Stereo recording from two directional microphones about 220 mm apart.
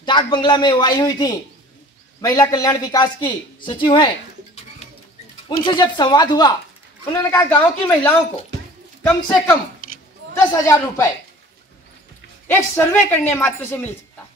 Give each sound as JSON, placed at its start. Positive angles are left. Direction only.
{"t": 0.0, "sound": "speech", "side_deg": 20}
{"t": 5.7, "sound": "a woman's voice", "side_deg": 20}
{"t": 12.4, "sound": "a woman's voice", "side_deg": 10}